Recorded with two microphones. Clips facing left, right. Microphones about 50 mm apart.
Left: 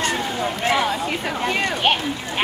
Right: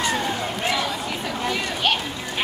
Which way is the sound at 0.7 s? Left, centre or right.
Left.